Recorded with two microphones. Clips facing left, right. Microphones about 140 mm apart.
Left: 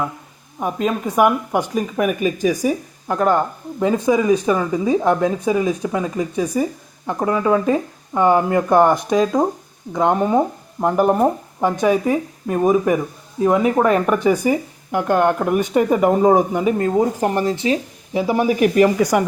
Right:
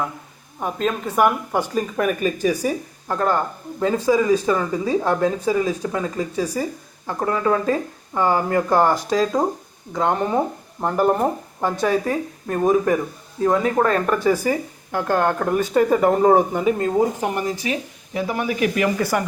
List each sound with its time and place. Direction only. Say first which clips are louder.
0.6 s speech: left 3 dB; 10° left (ahead or behind)
17.2 s speech: left 4 dB; 30° left (ahead or behind)
19.0 s speech: left 5 dB; 5° left (ahead or behind)